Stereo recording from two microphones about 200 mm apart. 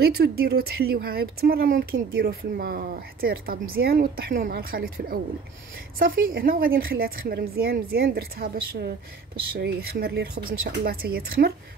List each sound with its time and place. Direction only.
0.0 s a woman's voice: 50° right (ahead or behind)